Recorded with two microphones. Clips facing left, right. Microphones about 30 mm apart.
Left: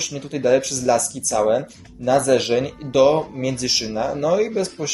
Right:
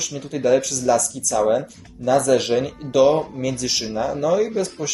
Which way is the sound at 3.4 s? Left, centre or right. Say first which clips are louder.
Left 1 dB; centre.